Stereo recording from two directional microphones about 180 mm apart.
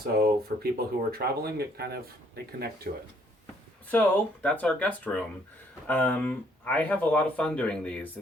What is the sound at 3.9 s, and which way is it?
Speech, 10° left (ahead or behind).